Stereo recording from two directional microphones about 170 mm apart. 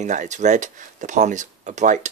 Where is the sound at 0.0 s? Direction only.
45° right (ahead or behind).